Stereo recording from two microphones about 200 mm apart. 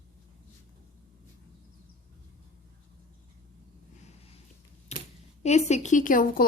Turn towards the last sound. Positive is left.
turn(degrees=45)  # may be behind; listen again after turning